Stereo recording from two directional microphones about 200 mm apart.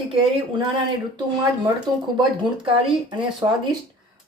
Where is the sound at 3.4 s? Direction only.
20° right (ahead or behind).